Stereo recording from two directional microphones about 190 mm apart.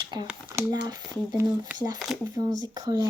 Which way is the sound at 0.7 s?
20° right (ahead or behind).